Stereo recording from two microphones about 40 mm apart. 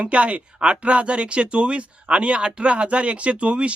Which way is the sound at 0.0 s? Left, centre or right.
Right.